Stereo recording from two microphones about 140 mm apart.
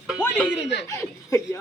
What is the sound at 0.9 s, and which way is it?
Speech, 20° left (ahead or behind).